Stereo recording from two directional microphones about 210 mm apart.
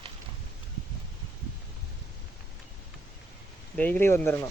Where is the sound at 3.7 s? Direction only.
5° left (ahead or behind).